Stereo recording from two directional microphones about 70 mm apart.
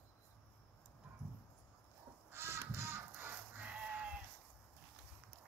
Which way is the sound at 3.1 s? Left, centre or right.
Right.